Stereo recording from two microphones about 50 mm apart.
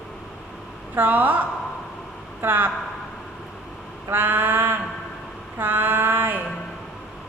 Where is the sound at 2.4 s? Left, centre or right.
Right.